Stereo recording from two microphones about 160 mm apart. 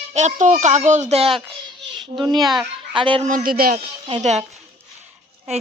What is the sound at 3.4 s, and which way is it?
Speech, 65° right (ahead or behind).